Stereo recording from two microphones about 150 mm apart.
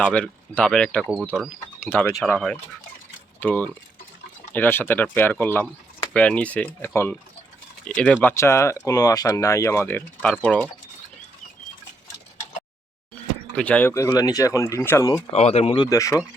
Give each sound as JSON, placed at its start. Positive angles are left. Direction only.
{"t": 0.0, "sound": "speech", "side_deg": 10}
{"t": 13.6, "sound": "speech", "side_deg": 10}
{"t": 13.9, "sound": "speech", "side_deg": 20}
{"t": 15.3, "sound": "speech", "side_deg": 45}
{"t": 15.8, "sound": "speech", "side_deg": 20}